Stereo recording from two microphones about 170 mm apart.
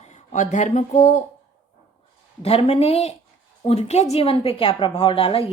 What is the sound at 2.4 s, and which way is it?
A woman's voice, 35° left (ahead or behind).